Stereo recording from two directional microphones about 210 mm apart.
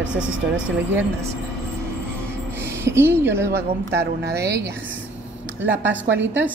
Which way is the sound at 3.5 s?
55° right (ahead or behind).